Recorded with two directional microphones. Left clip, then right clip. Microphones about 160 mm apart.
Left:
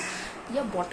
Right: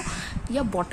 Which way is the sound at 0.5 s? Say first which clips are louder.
Right 2 dB; 65° right (ahead or behind).